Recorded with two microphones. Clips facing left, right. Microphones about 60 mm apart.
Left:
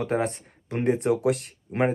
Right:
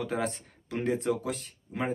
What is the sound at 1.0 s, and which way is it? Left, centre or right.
Speech, left.